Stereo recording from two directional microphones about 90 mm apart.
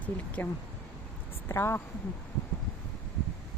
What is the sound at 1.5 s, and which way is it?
Speech, 30° left (ahead or behind).